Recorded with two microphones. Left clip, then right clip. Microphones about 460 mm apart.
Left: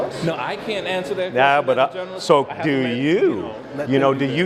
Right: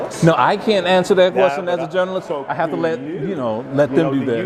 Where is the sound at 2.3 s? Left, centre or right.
Left.